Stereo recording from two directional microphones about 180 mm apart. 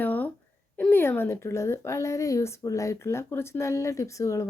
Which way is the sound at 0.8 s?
10° left (ahead or behind).